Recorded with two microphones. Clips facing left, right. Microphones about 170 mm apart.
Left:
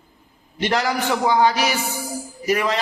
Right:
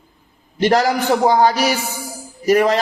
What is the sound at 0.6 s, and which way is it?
A man's voice, 40° right (ahead or behind).